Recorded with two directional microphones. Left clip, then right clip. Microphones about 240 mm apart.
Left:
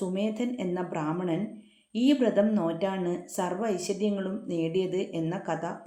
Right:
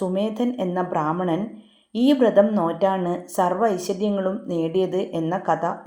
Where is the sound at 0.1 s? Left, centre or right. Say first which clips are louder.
Right 7 dB; centre.